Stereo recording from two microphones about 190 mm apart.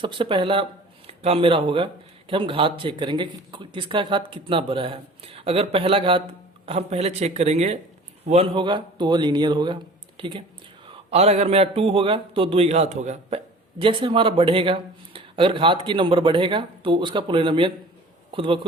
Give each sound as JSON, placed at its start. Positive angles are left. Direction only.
{"t": 0.0, "sound": "a man's voice", "side_deg": -25}